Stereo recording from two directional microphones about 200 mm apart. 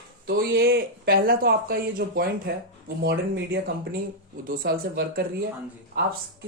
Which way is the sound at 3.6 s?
50° right (ahead or behind).